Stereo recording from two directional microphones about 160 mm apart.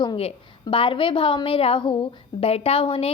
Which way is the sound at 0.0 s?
30° left (ahead or behind).